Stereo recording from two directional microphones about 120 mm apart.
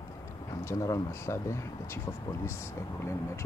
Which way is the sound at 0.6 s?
25° left (ahead or behind).